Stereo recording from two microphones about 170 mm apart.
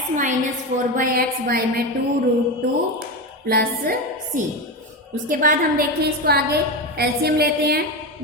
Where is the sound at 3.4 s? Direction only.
60° right (ahead or behind).